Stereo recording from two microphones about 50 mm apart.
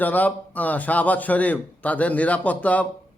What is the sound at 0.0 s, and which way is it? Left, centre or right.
A man's voice, left.